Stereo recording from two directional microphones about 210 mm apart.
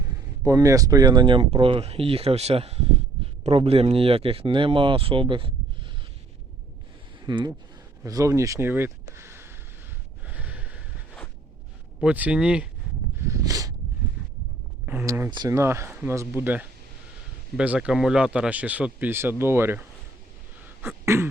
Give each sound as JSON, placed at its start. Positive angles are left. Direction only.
{"t": 0.4, "sound": "speech", "side_deg": -15}
{"t": 7.3, "sound": "speech", "side_deg": -20}
{"t": 10.2, "sound": "a sound", "side_deg": -5}
{"t": 11.9, "sound": "speech", "side_deg": -5}
{"t": 13.1, "sound": "a sound", "side_deg": -15}
{"t": 14.8, "sound": "speech", "side_deg": -10}
{"t": 20.8, "sound": "throat clearing", "side_deg": -10}